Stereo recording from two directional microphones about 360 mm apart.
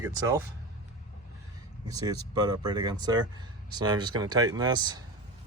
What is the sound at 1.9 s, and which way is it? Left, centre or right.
Speech, centre.